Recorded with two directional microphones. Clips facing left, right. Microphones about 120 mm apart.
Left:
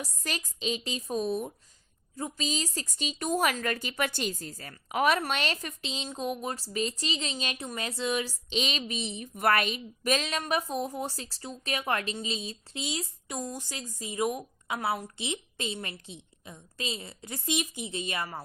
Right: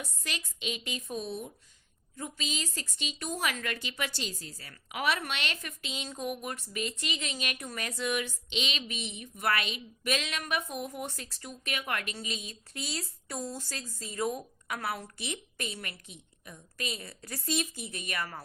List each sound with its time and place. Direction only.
0.0 s speech: 40° left (ahead or behind)
2.1 s speech: 35° left (ahead or behind)
3.5 s a woman's voice: 40° left (ahead or behind)
9.3 s a woman's voice: 50° left (ahead or behind); by 12.8 s 30° left (ahead or behind)
12.8 s a woman's voice: 15° left (ahead or behind)